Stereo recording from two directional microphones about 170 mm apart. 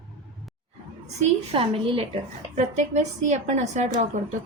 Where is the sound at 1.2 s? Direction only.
35° right (ahead or behind).